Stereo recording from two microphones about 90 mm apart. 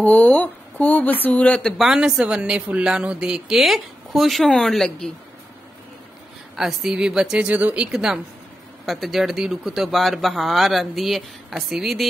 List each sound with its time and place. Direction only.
0.0 s speech: 15° left (ahead or behind)
1.7 s speech: 5° right (ahead or behind)
6.5 s a woman's voice: 5° right (ahead or behind)